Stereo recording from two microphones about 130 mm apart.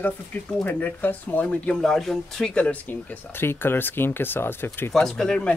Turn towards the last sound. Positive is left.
turn(degrees=5)  # may be behind; listen again after turning